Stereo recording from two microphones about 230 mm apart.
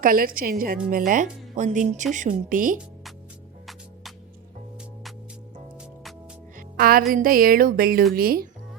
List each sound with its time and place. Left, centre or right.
0.0 s speech: right
5.7 s music: centre
6.6 s music: right
7.1 s speech: right